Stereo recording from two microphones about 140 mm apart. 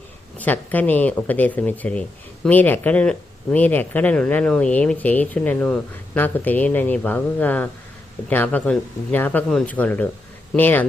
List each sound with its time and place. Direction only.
0.3 s speech: 10° left (ahead or behind)